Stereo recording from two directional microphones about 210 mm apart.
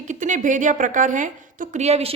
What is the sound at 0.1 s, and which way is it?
A woman's voice, 35° right (ahead or behind).